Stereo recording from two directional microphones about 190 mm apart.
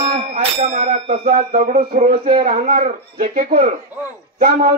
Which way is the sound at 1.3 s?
45° right (ahead or behind).